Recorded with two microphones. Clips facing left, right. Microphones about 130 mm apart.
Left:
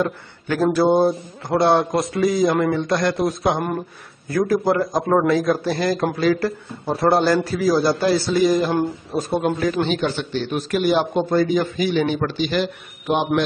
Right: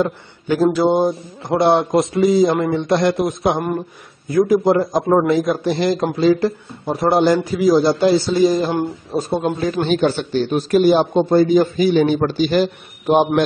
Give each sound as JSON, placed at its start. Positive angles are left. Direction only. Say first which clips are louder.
{"t": 0.0, "sound": "speech", "louder": "right 3 dB", "side_deg": -20}
{"t": 9.6, "sound": "a man's voice", "louder": "right 3 dB", "side_deg": -35}